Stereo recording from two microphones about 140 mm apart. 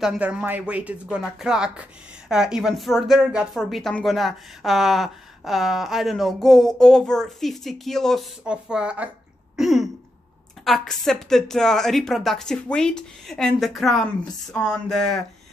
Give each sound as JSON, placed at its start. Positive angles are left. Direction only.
{"t": 0.0, "sound": "speech", "side_deg": -5}
{"t": 9.6, "sound": "throat clearing", "side_deg": 0}
{"t": 10.6, "sound": "speech", "side_deg": 0}